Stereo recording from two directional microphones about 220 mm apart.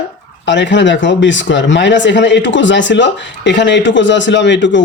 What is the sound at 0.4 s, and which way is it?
Speech, 55° left (ahead or behind).